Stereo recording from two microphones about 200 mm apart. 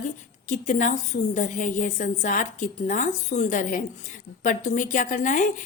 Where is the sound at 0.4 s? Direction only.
40° left (ahead or behind).